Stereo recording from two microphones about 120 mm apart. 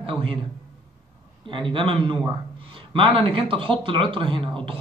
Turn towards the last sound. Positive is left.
turn(degrees=-45)  # may be behind; listen again after turning